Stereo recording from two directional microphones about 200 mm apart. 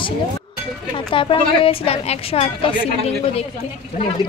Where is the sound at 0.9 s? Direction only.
25° left (ahead or behind).